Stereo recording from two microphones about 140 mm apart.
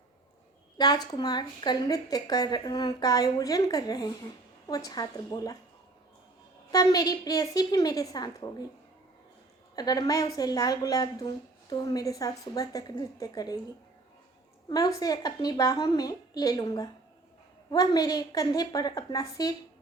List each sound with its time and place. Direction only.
0.8 s a woman's voice: 30° left (ahead or behind)
6.7 s a woman's voice: 25° left (ahead or behind)
9.7 s a woman's voice: 25° left (ahead or behind)
14.7 s a woman's voice: 25° left (ahead or behind)